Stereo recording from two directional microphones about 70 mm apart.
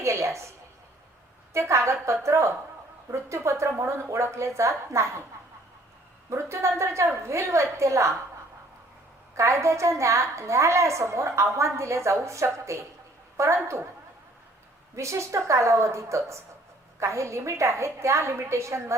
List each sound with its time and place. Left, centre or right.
0.0 s a sound: right
1.5 s a woman's voice: right
6.3 s a woman's voice: right
9.3 s a woman's voice: right
14.9 s a woman's voice: right